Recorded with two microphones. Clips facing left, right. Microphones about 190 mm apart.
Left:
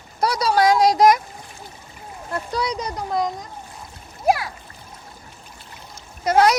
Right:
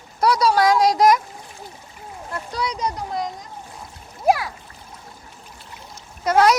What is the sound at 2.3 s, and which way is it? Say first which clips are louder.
Speech: left 3 dB; 35° left (ahead or behind).